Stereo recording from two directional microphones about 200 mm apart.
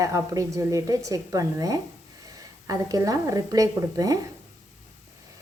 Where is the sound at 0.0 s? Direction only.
15° right (ahead or behind).